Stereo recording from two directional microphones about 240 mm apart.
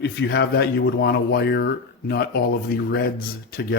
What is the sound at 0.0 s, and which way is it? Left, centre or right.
Speech, left.